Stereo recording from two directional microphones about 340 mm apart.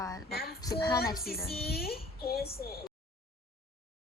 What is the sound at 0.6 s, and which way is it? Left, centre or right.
Speech, centre.